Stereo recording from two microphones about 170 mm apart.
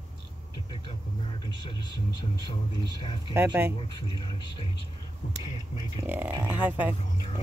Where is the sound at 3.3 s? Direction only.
15° right (ahead or behind).